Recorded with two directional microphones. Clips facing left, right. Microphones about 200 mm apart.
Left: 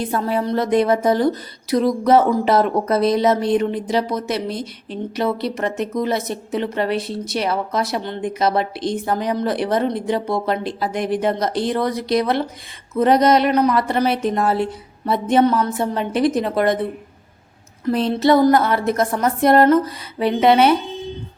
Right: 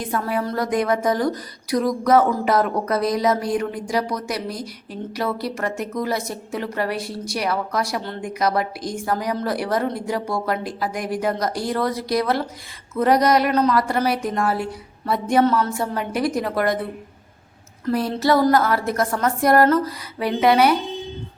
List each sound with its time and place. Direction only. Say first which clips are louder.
0.0 s a woman's voice: left 3 dB; 30° left (ahead or behind)
17.8 s a woman's voice: left 3 dB; 20° left (ahead or behind)